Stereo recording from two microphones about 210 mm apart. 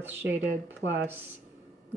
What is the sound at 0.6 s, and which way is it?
Speech, 60° right (ahead or behind).